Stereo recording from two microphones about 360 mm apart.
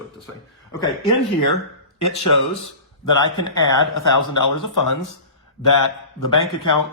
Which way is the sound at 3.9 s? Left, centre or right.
Left.